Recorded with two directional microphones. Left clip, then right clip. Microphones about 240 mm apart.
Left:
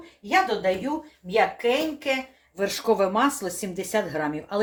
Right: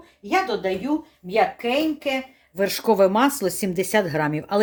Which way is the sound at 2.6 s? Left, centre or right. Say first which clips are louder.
Right 4 dB; right.